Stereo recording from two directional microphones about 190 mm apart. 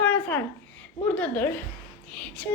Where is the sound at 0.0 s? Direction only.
10° left (ahead or behind).